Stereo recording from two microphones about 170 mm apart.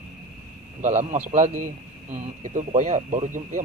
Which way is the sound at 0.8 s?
45° right (ahead or behind).